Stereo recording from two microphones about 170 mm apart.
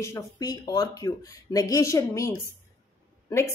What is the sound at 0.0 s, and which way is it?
Speech, 20° left (ahead or behind).